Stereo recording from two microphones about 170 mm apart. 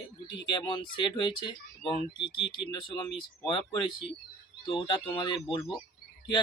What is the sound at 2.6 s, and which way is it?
Speech, 25° left (ahead or behind).